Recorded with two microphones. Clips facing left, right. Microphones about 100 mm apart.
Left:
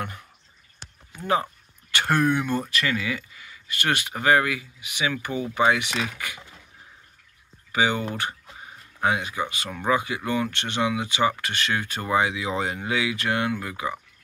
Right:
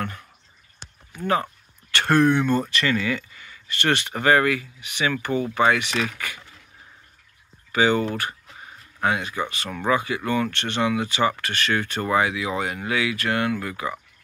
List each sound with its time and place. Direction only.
1.2 s speech: 15° left (ahead or behind)
7.7 s speech: 15° left (ahead or behind)